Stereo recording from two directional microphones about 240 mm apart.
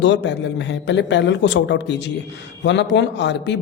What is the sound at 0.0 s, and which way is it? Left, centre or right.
A man's voice, left.